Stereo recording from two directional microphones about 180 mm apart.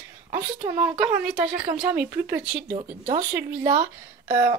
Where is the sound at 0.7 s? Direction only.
10° right (ahead or behind).